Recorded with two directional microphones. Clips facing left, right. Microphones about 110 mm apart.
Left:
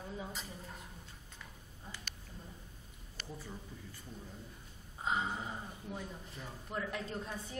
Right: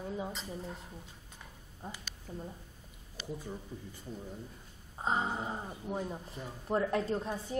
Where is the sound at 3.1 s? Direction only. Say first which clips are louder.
Right 6 dB; 15° right (ahead or behind).